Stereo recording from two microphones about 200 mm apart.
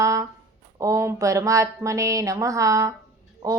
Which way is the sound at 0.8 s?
15° right (ahead or behind).